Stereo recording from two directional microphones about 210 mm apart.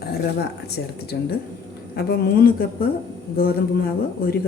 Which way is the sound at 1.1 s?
50° left (ahead or behind).